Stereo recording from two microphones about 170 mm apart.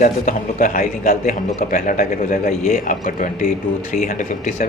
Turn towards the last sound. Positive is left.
turn(degrees=55)  # may be behind; listen again after turning